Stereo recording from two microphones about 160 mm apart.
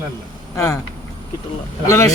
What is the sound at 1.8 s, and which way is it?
Speech, 20° left (ahead or behind).